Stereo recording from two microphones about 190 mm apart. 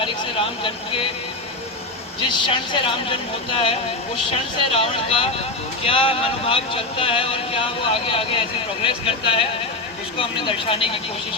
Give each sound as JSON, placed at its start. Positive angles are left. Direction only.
{"t": 2.3, "sound": "speech", "side_deg": 25}